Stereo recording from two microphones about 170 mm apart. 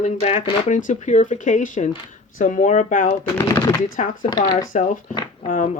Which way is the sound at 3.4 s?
15° left (ahead or behind).